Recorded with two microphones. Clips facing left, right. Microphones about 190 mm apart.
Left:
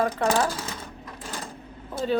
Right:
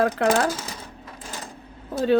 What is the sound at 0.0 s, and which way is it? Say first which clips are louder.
Speech: right 3 dB; 85° right.